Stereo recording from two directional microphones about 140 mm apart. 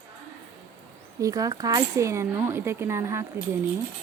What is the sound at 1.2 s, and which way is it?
Speech, 25° right (ahead or behind).